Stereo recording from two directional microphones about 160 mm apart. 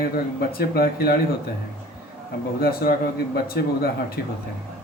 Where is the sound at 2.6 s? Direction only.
70° left (ahead or behind).